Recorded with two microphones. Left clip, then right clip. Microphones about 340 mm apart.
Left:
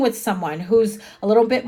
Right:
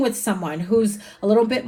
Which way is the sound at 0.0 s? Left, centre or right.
Left.